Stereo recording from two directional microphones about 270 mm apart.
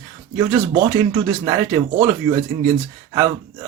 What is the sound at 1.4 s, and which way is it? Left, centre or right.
Speech, centre.